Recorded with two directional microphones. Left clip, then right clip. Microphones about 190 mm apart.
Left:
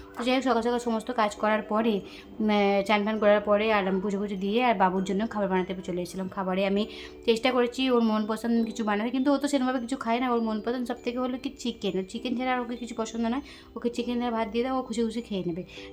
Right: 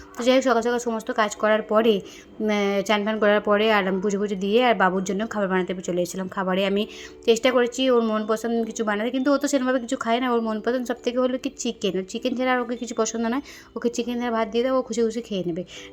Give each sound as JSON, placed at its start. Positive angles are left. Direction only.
{"t": 0.2, "sound": "a woman's voice", "side_deg": -15}